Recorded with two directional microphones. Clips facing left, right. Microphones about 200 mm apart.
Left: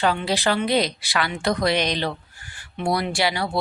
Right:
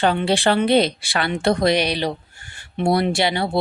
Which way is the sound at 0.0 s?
30° right (ahead or behind).